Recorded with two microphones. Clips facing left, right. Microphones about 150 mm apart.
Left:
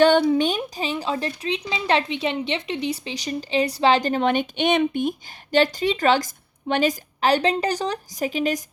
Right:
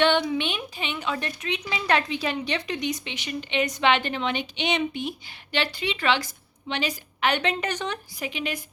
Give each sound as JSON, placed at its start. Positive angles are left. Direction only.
{"t": 0.0, "sound": "speech", "side_deg": 45}